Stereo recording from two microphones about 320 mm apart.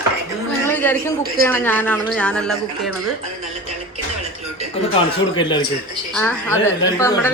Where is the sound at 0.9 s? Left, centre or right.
Right.